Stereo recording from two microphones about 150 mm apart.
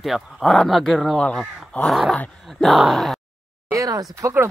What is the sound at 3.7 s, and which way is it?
Speech, 25° right (ahead or behind).